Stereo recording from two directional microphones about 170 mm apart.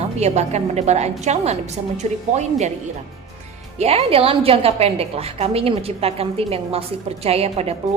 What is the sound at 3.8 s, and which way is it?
A woman's voice, 35° right (ahead or behind).